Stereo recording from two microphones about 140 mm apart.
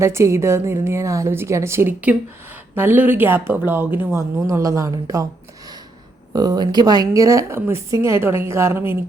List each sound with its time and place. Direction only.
0.0 s a woman's voice: 20° right (ahead or behind)